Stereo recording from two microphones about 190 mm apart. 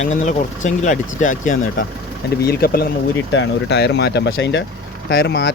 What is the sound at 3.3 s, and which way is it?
Speech, 65° left (ahead or behind).